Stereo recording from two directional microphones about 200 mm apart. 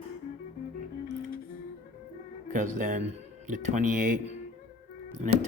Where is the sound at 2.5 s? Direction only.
40° right (ahead or behind).